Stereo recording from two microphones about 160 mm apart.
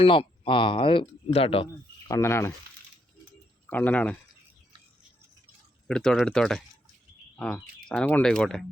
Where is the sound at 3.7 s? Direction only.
10° left (ahead or behind).